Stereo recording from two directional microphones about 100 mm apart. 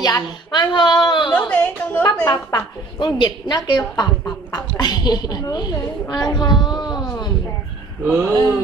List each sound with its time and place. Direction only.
0.0 s a woman's voice: 45° left (ahead or behind)
1.3 s a woman's voice: 15° left (ahead or behind)
2.2 s a woman's voice: 45° left (ahead or behind)
6.6 s a sound: 45° left (ahead or behind)
8.1 s speech: 20° right (ahead or behind)